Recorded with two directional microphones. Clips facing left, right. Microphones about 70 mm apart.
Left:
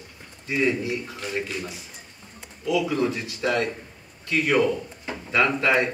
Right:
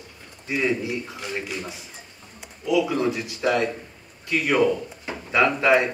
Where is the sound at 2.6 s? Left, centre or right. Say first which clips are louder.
Right 2 dB; right.